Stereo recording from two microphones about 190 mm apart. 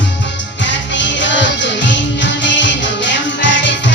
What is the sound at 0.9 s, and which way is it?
Music, 70° left (ahead or behind).